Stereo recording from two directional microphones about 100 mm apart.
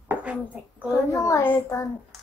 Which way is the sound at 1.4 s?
20° left (ahead or behind).